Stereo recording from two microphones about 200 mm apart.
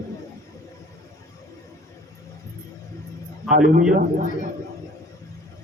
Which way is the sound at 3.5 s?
45° right (ahead or behind).